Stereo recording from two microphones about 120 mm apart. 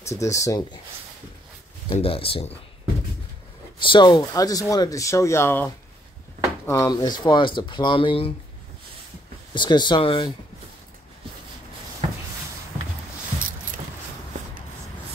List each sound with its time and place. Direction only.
0.1 s speech: 25° left (ahead or behind)
1.9 s speech: 50° left (ahead or behind)
3.8 s speech: 40° left (ahead or behind); by 6.9 s 20° left (ahead or behind)
6.9 s speech: 35° left (ahead or behind)
9.5 s speech: 40° left (ahead or behind)